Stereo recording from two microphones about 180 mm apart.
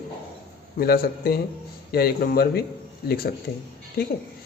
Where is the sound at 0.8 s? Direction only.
55° left (ahead or behind).